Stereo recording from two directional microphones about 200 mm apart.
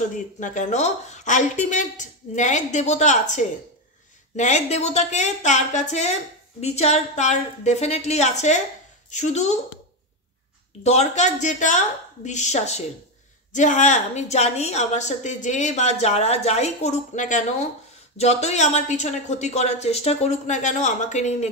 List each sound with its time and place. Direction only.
0.4 s a woman's voice: 35° left (ahead or behind)
10.8 s a woman's voice: 35° left (ahead or behind)